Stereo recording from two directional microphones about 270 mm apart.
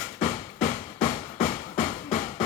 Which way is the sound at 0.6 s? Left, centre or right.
Left.